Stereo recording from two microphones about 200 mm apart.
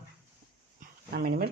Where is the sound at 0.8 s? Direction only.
50° right (ahead or behind).